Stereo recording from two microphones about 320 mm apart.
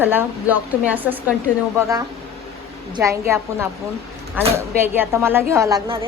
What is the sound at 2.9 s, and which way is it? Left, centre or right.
Speech, centre.